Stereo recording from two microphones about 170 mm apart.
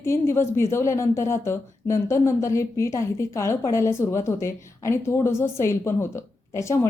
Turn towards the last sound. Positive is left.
turn(degrees=15)  # may be behind; listen again after turning